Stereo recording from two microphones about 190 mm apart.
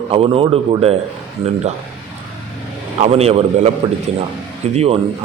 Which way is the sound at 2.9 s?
35° right (ahead or behind).